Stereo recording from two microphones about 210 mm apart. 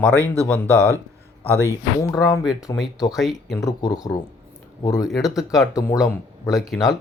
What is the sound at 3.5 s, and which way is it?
Speech, 15° left (ahead or behind).